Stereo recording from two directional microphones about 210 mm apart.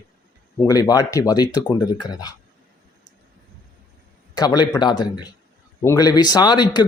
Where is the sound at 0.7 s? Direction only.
15° left (ahead or behind).